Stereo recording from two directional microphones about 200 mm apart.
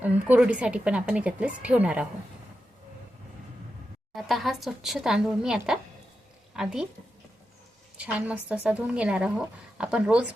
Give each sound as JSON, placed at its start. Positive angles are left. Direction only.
{"t": 0.0, "sound": "speech", "side_deg": -5}
{"t": 4.1, "sound": "speech", "side_deg": 0}
{"t": 7.9, "sound": "speech", "side_deg": -5}